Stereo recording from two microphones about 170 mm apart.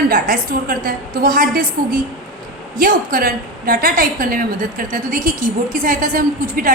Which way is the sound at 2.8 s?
55° right (ahead or behind).